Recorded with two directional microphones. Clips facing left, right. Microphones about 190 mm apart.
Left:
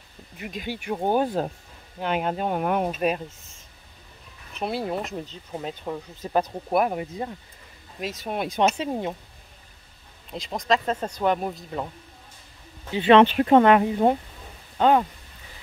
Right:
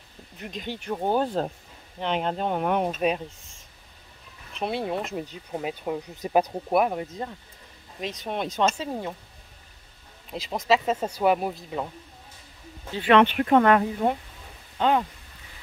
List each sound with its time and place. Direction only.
0.4 s speech: 5° left (ahead or behind)
5.2 s speech: 10° right (ahead or behind)
6.8 s speech: 5° left (ahead or behind)
8.5 s speech: 15° left (ahead or behind)
10.3 s speech: 5° right (ahead or behind)
12.9 s speech: 25° left (ahead or behind)
14.8 s speech: 45° left (ahead or behind)